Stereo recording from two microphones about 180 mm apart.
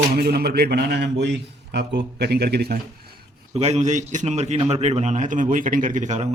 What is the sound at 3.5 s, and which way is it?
A man's voice, 35° right (ahead or behind).